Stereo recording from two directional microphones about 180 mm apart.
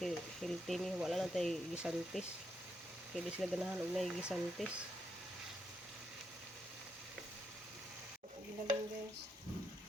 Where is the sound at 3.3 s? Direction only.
5° right (ahead or behind).